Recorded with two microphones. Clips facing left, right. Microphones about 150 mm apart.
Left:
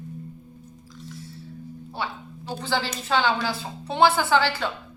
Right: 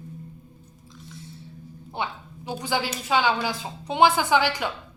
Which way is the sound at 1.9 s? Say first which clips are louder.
Right 1 dB; 15° right (ahead or behind).